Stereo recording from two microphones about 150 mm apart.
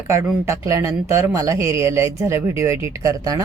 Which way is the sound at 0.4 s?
20° right (ahead or behind).